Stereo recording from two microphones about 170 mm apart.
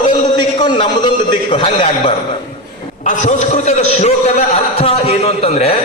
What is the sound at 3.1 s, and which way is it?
A man's voice, 45° left (ahead or behind).